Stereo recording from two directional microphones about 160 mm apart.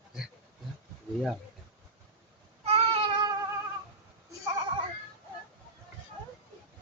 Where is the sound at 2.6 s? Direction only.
35° right (ahead or behind).